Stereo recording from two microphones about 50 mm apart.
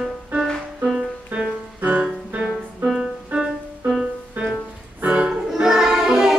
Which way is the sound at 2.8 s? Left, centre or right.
Centre.